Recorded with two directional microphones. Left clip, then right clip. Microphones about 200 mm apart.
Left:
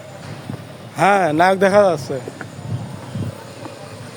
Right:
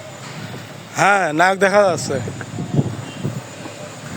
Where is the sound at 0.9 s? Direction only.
5° left (ahead or behind).